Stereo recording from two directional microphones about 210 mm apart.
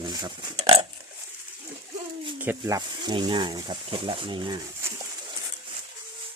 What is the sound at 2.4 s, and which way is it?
Speech, 15° right (ahead or behind).